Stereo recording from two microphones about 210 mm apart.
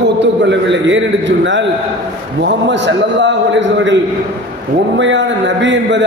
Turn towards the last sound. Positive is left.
turn(degrees=-60)  # may be behind; listen again after turning